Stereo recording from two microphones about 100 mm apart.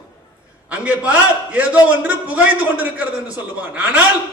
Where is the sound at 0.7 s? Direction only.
10° right (ahead or behind).